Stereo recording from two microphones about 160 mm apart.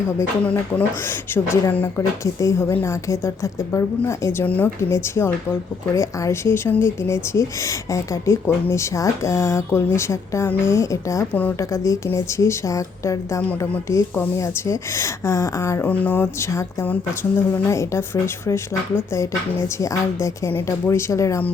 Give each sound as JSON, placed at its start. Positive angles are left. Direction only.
{"t": 0.2, "sound": "speech", "side_deg": 10}